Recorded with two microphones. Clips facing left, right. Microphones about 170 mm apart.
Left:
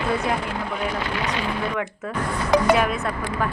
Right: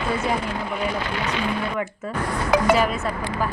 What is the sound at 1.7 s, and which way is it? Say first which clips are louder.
Speech: even; 5° right (ahead or behind).